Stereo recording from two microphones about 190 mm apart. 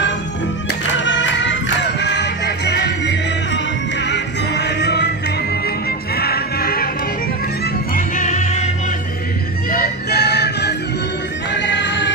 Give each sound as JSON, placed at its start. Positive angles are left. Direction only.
{"t": 0.9, "sound": "music", "side_deg": 70}
{"t": 7.9, "sound": "music", "side_deg": 45}
{"t": 9.7, "sound": "music", "side_deg": 55}
{"t": 11.5, "sound": "music", "side_deg": 70}